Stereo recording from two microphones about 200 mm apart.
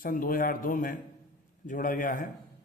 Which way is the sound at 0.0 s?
45° left (ahead or behind).